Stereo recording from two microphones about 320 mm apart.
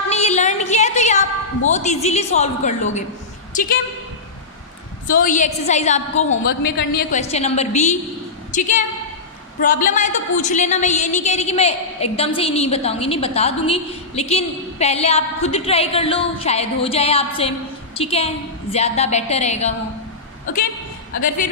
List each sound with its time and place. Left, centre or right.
0.1 s a sound: left
3.5 s a woman's voice: left
5.2 s a woman's voice: left